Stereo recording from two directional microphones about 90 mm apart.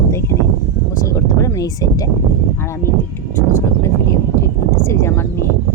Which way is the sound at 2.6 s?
30° left (ahead or behind).